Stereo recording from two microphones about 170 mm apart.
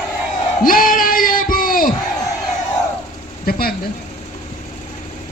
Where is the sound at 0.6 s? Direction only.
55° left (ahead or behind).